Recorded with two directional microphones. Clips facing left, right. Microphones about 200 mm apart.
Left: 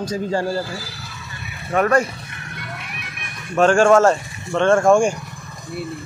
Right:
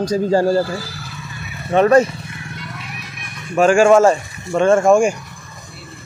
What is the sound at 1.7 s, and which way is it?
Speech, 20° right (ahead or behind).